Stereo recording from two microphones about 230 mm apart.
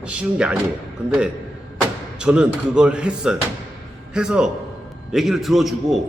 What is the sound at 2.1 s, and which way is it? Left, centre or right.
A man's voice, centre.